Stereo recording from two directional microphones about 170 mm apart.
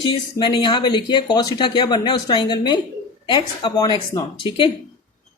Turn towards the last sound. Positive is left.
turn(degrees=30)  # may be behind; listen again after turning